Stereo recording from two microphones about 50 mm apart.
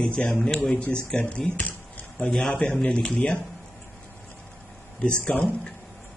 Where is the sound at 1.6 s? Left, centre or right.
Left.